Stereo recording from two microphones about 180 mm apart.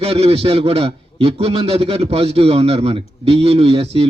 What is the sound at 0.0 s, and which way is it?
A man's voice, 35° right (ahead or behind).